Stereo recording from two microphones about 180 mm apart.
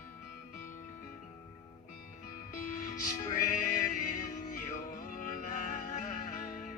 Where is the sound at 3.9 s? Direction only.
50° left (ahead or behind).